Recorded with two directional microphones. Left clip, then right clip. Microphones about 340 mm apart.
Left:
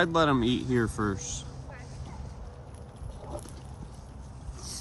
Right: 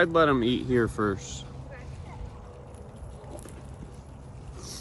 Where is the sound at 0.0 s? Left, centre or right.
Centre.